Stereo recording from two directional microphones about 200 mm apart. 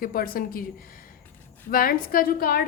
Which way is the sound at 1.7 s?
45° left (ahead or behind).